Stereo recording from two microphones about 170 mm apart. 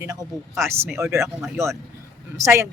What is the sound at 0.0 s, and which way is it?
Speech, 20° right (ahead or behind).